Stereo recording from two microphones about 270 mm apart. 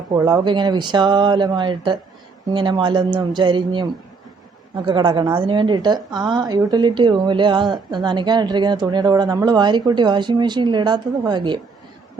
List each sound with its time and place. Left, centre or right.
0.1 s a woman's voice: centre
4.9 s a woman's voice: centre